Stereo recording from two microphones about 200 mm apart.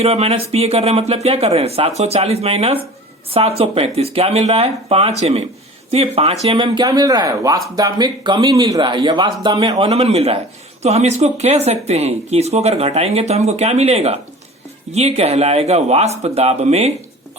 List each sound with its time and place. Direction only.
0.0 s a man's voice: 30° right (ahead or behind)